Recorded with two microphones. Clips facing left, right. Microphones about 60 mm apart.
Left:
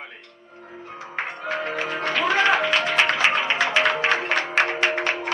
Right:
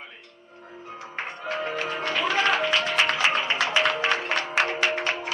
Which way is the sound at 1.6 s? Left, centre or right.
Left.